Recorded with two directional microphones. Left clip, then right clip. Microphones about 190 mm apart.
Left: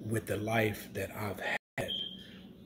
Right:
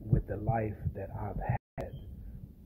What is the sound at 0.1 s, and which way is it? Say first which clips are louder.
Speech: left 2 dB; 25° left (ahead or behind).